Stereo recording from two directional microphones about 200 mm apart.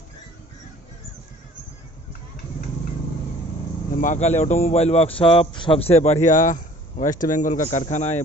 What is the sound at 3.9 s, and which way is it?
A man's voice, 40° left (ahead or behind).